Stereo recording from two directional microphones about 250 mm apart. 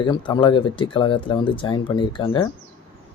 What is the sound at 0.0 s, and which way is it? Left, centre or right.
Speech, centre.